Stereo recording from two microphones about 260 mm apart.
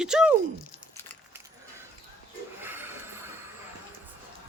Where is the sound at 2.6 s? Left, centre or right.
Centre.